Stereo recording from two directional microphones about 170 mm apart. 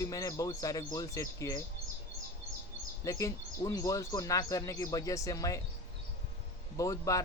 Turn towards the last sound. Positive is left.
turn(degrees=20)  # may be behind; listen again after turning